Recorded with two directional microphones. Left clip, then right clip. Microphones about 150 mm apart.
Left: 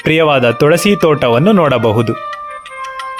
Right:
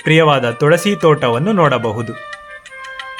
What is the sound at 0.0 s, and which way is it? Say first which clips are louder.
Speech: left 2 dB; 40° left (ahead or behind).